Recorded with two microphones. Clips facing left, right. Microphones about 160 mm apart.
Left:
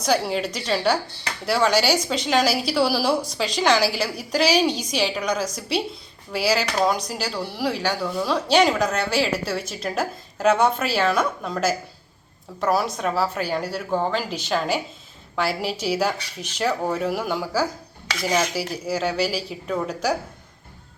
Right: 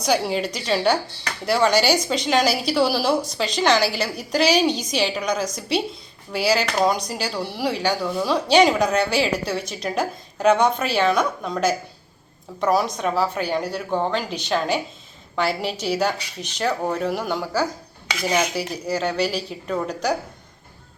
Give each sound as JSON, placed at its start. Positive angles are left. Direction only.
{"t": 0.3, "sound": "a woman's voice", "side_deg": 0}
{"t": 18.1, "sound": "cutlery", "side_deg": -10}
{"t": 18.5, "sound": "a woman's voice", "side_deg": 5}